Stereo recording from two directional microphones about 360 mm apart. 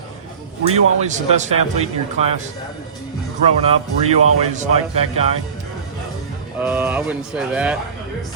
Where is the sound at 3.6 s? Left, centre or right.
Centre.